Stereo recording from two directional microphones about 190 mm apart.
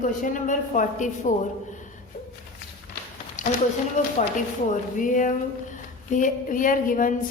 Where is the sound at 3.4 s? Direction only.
40° left (ahead or behind).